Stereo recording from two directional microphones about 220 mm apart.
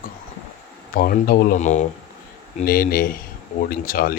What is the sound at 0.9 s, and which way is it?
Speech, 40° left (ahead or behind).